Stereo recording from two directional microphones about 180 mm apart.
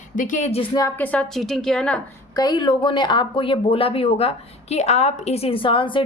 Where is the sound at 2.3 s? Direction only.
25° left (ahead or behind).